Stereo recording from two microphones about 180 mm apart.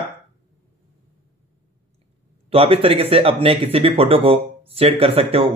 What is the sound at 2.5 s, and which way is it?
Speech, 30° right (ahead or behind).